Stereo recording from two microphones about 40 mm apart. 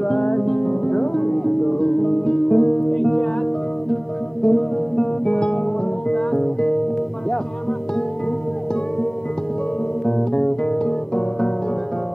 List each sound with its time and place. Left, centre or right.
0.0 s music: left
10.0 s music: centre